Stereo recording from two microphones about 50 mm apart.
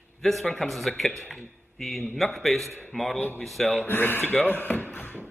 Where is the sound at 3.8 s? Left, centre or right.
Left.